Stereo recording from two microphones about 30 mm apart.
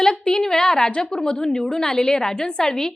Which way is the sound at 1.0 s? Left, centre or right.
Left.